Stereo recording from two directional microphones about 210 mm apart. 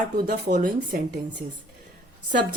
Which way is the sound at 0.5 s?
40° right (ahead or behind).